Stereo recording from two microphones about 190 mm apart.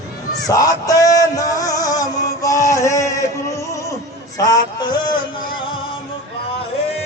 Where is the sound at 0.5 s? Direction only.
20° left (ahead or behind).